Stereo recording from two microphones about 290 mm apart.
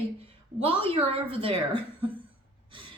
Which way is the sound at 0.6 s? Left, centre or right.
Centre.